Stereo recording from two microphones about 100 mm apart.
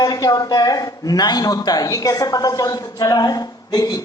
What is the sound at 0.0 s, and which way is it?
A man's voice, 40° left (ahead or behind).